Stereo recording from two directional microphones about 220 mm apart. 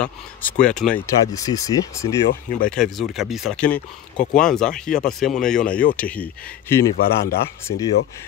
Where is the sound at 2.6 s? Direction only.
Centre (ahead or behind).